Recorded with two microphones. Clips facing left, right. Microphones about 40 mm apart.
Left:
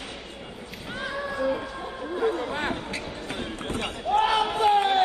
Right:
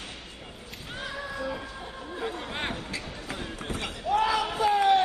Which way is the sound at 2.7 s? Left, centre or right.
Left.